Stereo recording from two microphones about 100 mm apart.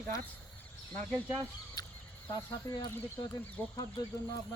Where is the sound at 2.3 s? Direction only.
45° left (ahead or behind).